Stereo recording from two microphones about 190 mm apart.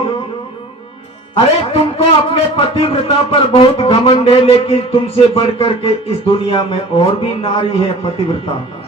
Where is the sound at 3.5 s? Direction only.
30° left (ahead or behind).